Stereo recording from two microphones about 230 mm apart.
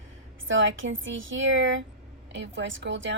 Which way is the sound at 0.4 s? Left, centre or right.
Right.